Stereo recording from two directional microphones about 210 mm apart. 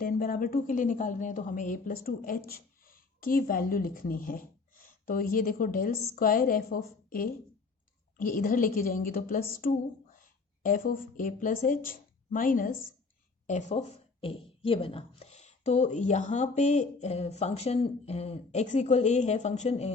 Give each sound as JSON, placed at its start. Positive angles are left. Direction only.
{"t": 0.0, "sound": "a woman's voice", "side_deg": 45}